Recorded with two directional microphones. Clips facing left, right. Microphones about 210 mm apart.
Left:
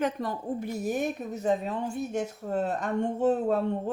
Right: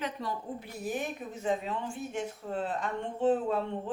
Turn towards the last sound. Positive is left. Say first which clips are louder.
# left 5 dB
turn(degrees=40)  # may be behind; listen again after turning